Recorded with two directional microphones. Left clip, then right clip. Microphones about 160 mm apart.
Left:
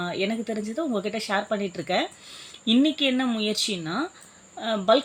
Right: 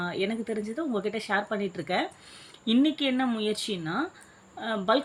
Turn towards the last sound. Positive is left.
turn(degrees=40)  # may be behind; listen again after turning